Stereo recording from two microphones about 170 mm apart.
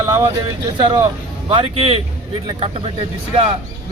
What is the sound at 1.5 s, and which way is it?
Speech, 30° right (ahead or behind).